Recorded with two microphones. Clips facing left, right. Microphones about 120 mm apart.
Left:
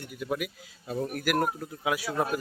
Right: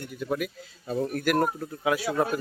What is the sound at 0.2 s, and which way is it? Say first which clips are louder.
Speech: right 2 dB; 5° left (ahead or behind).